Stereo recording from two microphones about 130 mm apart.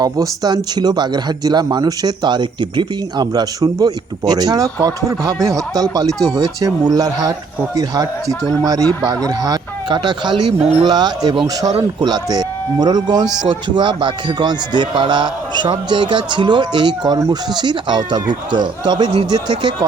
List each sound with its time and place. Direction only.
0.0 s speech: 30° right (ahead or behind)